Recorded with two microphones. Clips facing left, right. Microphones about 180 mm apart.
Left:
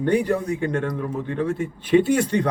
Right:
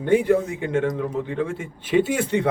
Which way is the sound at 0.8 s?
20° right (ahead or behind).